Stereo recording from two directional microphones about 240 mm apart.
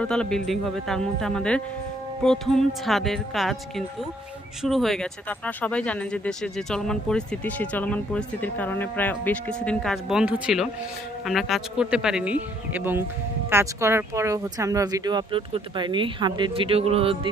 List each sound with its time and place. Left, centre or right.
0.0 s speech: centre; by 17.3 s right